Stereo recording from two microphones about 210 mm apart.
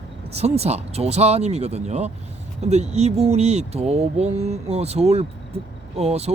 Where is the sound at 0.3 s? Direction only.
30° right (ahead or behind).